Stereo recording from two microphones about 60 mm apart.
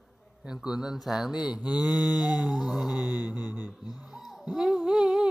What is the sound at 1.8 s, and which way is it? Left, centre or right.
Mantra, centre.